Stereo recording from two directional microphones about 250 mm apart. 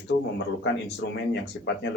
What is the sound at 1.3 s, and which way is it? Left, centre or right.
Speech, left.